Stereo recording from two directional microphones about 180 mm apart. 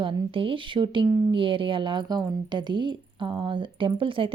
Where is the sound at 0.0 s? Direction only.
30° right (ahead or behind).